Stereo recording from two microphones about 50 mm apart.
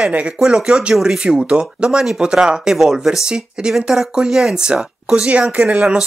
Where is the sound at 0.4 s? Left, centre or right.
Centre.